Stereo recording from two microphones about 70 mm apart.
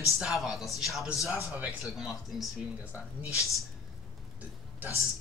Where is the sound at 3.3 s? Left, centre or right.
Left.